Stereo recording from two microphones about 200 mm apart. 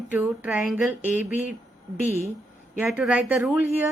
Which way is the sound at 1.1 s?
40° left (ahead or behind).